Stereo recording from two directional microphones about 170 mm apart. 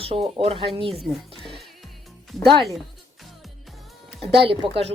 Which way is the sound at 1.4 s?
Centre (ahead or behind).